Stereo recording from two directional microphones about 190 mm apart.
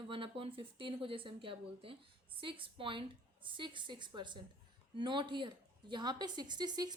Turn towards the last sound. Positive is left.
turn(degrees=-20)  # may be behind; listen again after turning